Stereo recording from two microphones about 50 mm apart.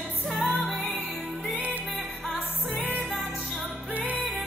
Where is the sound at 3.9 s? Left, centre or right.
Right.